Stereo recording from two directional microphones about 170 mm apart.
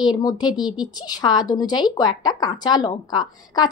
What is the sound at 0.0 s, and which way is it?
A woman's voice, 25° left (ahead or behind).